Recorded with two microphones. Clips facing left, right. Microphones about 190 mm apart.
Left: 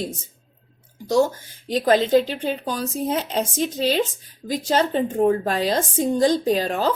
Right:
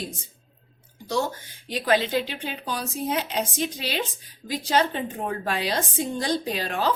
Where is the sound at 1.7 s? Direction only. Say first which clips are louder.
Left 6 dB; 40° left (ahead or behind).